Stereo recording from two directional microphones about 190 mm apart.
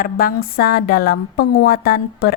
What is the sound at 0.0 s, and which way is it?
A woman's voice, 50° left (ahead or behind).